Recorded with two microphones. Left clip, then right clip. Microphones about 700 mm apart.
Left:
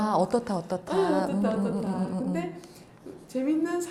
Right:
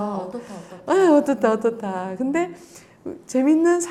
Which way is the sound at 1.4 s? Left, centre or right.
Right.